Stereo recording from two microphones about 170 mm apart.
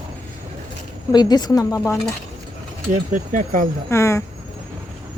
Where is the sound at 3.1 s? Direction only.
50° right (ahead or behind).